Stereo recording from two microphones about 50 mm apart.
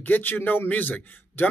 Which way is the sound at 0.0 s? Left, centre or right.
Left.